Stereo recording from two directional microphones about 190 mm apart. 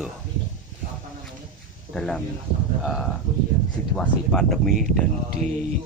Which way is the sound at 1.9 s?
5° left (ahead or behind).